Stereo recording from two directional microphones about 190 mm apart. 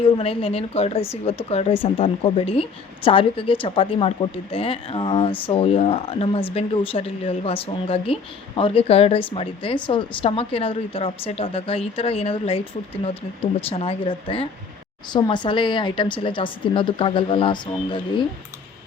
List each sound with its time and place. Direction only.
0.0 s speech: 30° left (ahead or behind)